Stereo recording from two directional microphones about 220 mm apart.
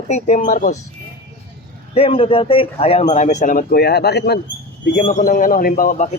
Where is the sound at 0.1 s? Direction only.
35° left (ahead or behind).